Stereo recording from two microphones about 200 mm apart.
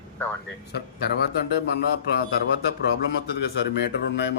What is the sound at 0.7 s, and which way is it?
Speech, 55° left (ahead or behind).